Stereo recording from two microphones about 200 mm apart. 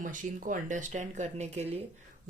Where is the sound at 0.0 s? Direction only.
40° right (ahead or behind).